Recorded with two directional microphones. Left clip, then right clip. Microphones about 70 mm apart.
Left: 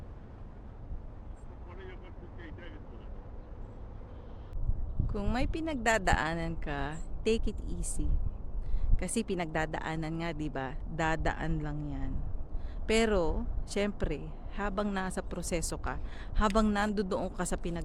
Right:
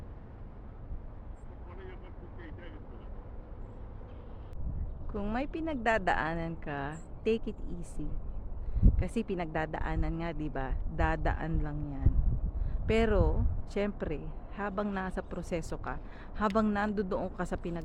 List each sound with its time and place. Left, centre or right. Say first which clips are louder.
5.0 s speech: even; left